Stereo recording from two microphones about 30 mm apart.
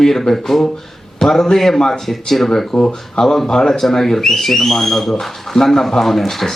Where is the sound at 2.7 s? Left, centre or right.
Centre.